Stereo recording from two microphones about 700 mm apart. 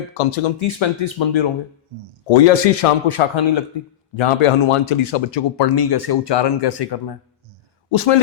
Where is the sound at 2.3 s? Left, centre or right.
Left.